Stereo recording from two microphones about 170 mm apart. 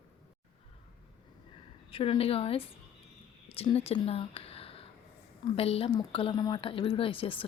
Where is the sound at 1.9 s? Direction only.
35° left (ahead or behind).